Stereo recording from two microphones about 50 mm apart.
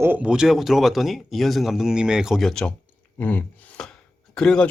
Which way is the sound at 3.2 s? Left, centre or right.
Left.